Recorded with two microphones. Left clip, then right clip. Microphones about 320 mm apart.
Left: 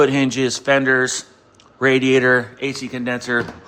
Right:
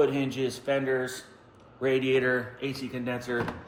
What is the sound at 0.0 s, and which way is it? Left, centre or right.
Speech, left.